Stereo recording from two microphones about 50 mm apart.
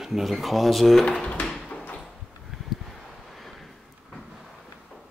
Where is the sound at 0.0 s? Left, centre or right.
Centre.